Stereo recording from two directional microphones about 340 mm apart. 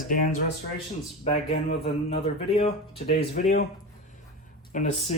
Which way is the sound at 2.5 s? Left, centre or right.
Centre.